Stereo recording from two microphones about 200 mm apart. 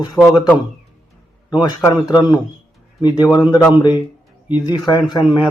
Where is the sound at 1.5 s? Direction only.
20° left (ahead or behind).